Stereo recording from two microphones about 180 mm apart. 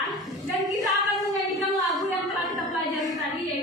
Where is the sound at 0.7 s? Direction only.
20° right (ahead or behind).